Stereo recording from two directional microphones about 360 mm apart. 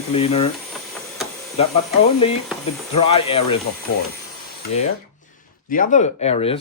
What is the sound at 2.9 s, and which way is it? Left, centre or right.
Speech, centre.